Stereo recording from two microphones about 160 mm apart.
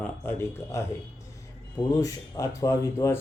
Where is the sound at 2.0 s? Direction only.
20° left (ahead or behind).